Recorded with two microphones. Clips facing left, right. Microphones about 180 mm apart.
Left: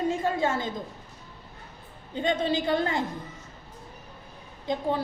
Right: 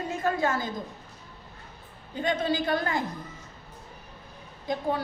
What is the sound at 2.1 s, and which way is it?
Speech, 25° left (ahead or behind).